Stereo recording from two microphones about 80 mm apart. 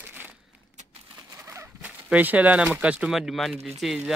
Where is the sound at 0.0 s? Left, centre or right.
Right.